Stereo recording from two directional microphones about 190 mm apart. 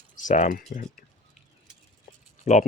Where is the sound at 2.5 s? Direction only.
35° left (ahead or behind).